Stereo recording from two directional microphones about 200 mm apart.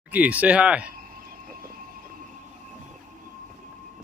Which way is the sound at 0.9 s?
45° right (ahead or behind).